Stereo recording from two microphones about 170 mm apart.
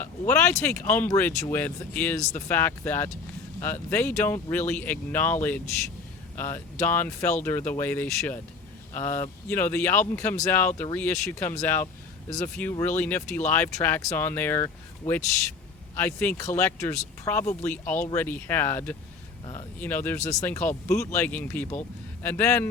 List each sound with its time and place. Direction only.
0.0 s speech: 10° left (ahead or behind)
20.1 s speech: 40° left (ahead or behind)
20.4 s speech: 10° left (ahead or behind)